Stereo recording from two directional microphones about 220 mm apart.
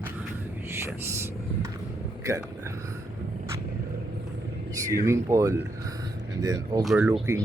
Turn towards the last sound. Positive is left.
turn(degrees=0)  # may be behind; listen again after turning